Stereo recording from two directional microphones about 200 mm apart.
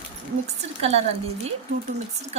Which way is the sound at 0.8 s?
30° right (ahead or behind).